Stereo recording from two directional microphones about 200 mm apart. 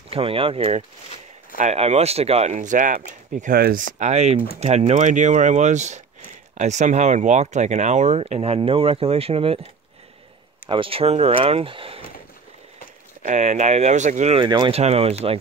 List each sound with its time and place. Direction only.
0.1 s speech: 30° right (ahead or behind); by 3.8 s 45° right (ahead or behind)
4.0 s speech: 35° right (ahead or behind)
10.7 s speech: 25° right (ahead or behind)
13.2 s speech: 35° right (ahead or behind)